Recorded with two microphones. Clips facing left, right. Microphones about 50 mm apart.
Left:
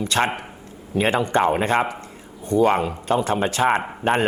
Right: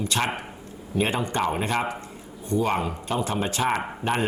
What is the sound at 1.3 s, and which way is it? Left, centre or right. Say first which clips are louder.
Speech: left 7 dB; left.